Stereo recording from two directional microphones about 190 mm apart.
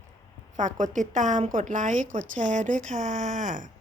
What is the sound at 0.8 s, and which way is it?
A woman's voice, 40° right (ahead or behind).